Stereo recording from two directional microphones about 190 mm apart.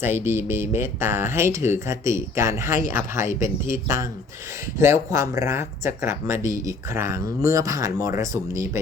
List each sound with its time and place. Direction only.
0.0 s speech: 10° right (ahead or behind)